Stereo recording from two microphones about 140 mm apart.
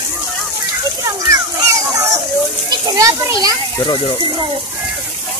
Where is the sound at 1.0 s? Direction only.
25° right (ahead or behind).